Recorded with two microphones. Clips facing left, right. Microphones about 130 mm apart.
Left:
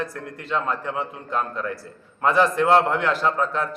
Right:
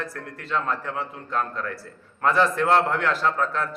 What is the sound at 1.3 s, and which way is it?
A man's voice, 5° left (ahead or behind).